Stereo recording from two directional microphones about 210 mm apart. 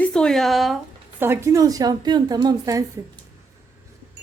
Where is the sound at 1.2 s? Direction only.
15° right (ahead or behind).